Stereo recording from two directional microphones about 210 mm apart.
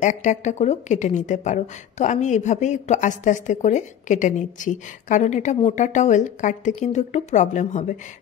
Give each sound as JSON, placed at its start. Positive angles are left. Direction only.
{"t": 0.0, "sound": "speech", "side_deg": 35}